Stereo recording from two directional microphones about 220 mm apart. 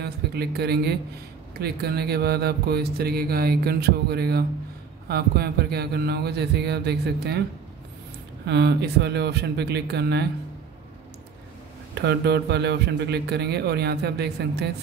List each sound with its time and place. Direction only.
0.0 s a man's voice: 45° right (ahead or behind)
8.5 s speech: 50° right (ahead or behind)
11.9 s speech: 50° right (ahead or behind)